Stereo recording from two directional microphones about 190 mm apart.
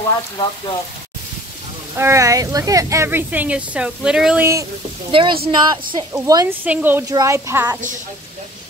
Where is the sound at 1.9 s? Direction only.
15° right (ahead or behind).